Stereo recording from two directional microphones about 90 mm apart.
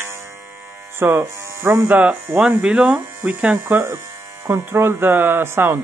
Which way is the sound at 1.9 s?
20° right (ahead or behind).